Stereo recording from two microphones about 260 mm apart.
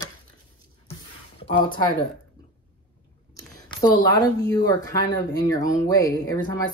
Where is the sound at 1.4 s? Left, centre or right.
Centre.